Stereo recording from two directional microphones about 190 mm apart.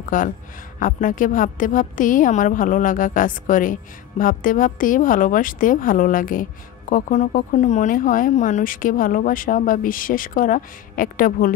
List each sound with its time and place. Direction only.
0.1 s a woman's voice: 45° left (ahead or behind)